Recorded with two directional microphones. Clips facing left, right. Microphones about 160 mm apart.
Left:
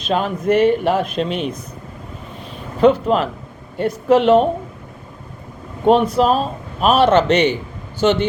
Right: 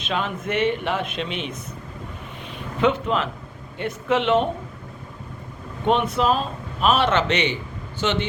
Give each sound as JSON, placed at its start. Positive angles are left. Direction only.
{"t": 0.0, "sound": "a man's voice", "side_deg": 40}
{"t": 2.4, "sound": "a sound", "side_deg": 35}
{"t": 3.8, "sound": "a man's voice", "side_deg": 40}
{"t": 5.8, "sound": "a man's voice", "side_deg": 35}